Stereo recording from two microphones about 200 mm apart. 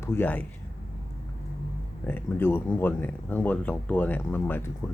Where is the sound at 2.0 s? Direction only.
10° left (ahead or behind).